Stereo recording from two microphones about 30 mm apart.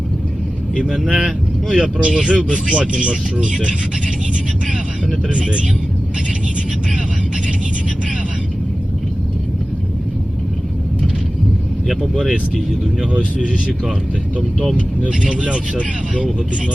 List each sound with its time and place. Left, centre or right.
0.9 s speech: centre
1.7 s speech: right
13.1 s speech: right
15.0 s speech: right